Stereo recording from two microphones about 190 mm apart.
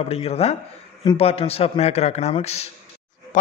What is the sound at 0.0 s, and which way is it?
A man's voice, 30° left (ahead or behind).